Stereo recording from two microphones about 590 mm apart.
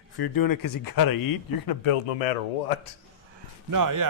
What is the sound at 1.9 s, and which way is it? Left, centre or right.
Speech, left.